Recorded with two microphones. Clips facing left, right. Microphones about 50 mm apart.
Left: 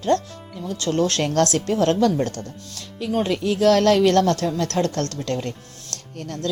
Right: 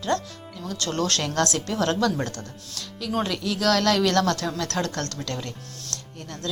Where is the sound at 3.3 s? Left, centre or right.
Left.